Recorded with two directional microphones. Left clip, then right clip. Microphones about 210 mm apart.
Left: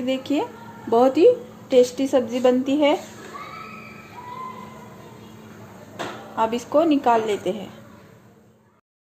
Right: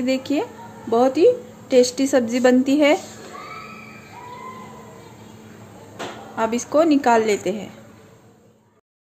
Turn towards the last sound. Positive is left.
turn(degrees=-15)  # may be behind; listen again after turning